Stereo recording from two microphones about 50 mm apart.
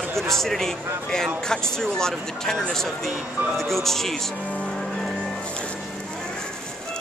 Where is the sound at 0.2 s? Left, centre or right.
Centre.